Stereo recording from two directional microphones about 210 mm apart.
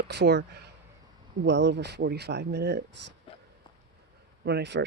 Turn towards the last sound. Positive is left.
turn(degrees=-55)  # may be behind; listen again after turning